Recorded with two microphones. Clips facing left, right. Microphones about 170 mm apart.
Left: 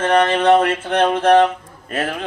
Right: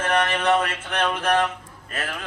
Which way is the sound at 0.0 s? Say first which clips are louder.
Left 7 dB; 30° left (ahead or behind).